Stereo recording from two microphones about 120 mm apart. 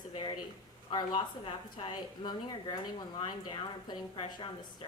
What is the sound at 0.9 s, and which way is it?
A woman's voice, 40° left (ahead or behind).